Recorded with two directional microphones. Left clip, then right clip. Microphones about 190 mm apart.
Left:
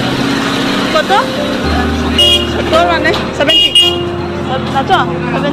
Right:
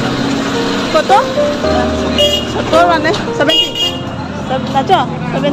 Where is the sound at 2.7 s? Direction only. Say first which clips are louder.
Right 1 dB; 20° right (ahead or behind).